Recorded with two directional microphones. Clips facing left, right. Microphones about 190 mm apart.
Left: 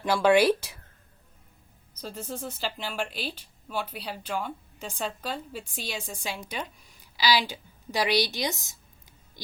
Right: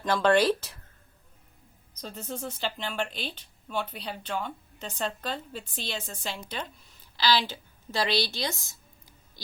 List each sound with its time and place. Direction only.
0.0 s a woman's voice: 10° left (ahead or behind)
2.0 s a woman's voice: 5° left (ahead or behind)